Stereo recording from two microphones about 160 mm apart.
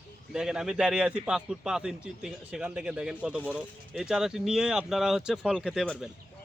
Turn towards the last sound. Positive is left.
turn(degrees=-5)  # may be behind; listen again after turning